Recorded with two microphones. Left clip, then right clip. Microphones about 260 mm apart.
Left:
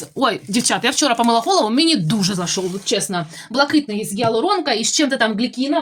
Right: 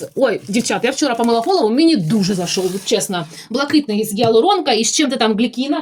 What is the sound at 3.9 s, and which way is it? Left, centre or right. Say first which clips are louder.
Speech: right 5 dB; centre.